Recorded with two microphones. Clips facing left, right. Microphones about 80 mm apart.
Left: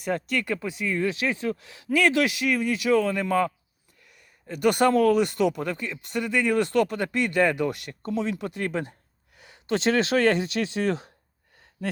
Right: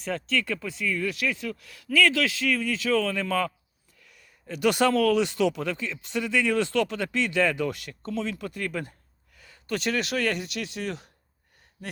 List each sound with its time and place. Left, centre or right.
0.3 s speech: centre
4.4 s speech: centre; by 11.1 s left